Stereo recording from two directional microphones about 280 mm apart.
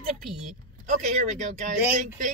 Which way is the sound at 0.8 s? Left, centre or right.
Right.